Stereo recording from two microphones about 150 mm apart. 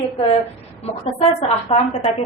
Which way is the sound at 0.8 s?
40° left (ahead or behind).